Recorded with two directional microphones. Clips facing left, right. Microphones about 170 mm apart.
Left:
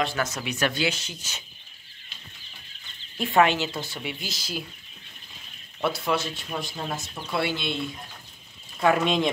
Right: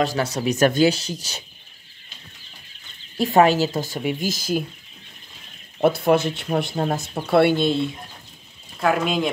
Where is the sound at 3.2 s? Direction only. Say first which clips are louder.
Right 5 dB; 40° right (ahead or behind).